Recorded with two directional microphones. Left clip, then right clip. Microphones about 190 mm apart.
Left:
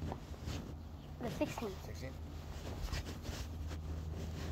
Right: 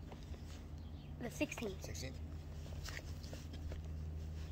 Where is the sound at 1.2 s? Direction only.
10° right (ahead or behind).